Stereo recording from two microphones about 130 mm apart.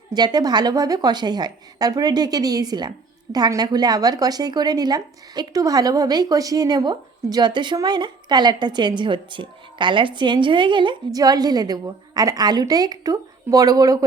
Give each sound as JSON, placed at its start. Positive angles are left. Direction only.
{"t": 0.1, "sound": "a woman's voice", "side_deg": -30}